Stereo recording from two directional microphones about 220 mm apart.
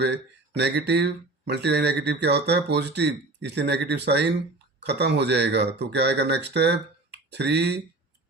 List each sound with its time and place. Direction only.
0.0 s speech: 50° right (ahead or behind)